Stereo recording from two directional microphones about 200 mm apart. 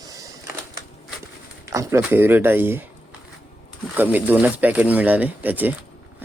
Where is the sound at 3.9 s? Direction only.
10° right (ahead or behind).